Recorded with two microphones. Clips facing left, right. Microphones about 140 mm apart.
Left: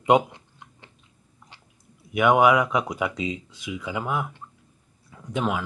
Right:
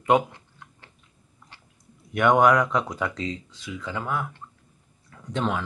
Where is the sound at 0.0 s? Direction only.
20° left (ahead or behind).